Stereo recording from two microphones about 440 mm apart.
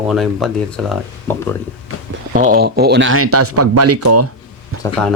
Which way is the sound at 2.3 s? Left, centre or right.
Centre.